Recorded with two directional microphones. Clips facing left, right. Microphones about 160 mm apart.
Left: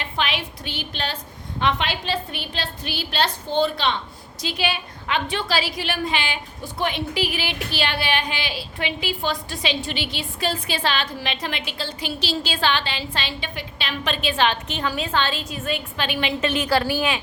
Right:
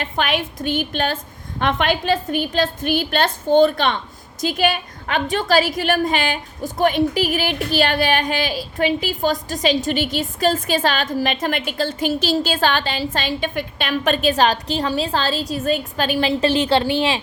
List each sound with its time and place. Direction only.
0.0 s a woman's voice: 50° right (ahead or behind); by 17.2 s 25° right (ahead or behind)